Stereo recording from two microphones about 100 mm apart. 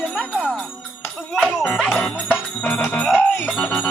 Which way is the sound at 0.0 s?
10° left (ahead or behind).